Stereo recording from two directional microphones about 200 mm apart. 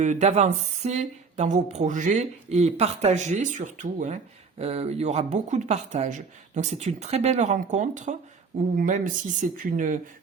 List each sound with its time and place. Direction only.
0.0 s speech: 35° right (ahead or behind)